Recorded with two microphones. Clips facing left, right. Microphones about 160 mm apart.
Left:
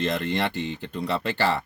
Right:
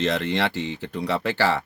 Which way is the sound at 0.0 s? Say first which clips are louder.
Right 2 dB; 70° right (ahead or behind).